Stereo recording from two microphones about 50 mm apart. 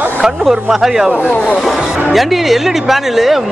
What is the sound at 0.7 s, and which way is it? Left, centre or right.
Speech, centre.